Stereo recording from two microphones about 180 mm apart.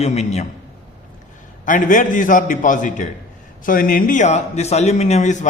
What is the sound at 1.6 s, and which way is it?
A man's voice, 45° left (ahead or behind).